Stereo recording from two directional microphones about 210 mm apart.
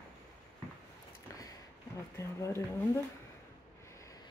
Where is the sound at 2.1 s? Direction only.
15° left (ahead or behind).